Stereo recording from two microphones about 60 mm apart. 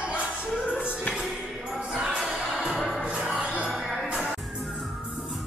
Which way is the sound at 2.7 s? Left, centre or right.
Centre.